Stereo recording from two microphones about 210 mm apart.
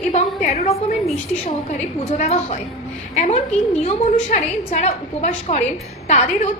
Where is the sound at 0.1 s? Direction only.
30° left (ahead or behind).